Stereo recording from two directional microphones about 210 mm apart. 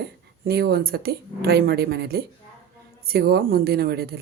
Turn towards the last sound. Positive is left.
turn(degrees=-50)  # may be behind; listen again after turning